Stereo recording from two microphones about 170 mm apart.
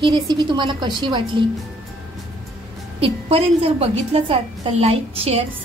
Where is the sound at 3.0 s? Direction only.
35° right (ahead or behind).